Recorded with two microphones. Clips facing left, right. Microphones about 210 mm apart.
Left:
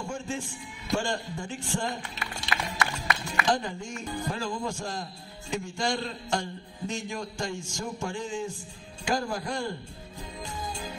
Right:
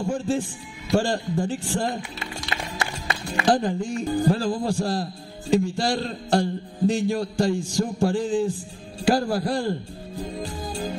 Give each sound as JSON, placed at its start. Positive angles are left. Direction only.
{"t": 0.0, "sound": "a man's voice", "side_deg": -35}